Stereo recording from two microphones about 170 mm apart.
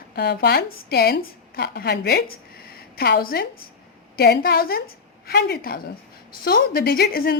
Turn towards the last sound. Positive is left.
turn(degrees=65)  # may be behind; listen again after turning